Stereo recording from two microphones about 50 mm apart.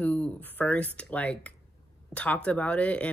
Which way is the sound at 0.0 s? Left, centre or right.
Left.